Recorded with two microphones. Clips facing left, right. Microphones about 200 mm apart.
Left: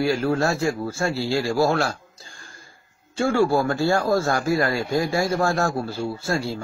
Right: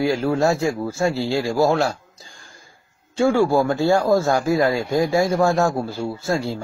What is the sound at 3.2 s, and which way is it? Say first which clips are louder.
Speech: right 3 dB; 15° right (ahead or behind).